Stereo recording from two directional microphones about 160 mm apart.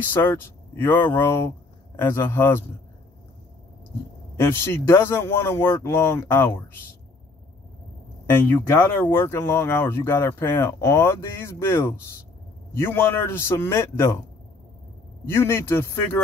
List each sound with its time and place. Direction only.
0.1 s speech: 15° left (ahead or behind)
4.4 s speech: 15° left (ahead or behind)
8.3 s speech: 15° left (ahead or behind)
15.2 s speech: 15° left (ahead or behind)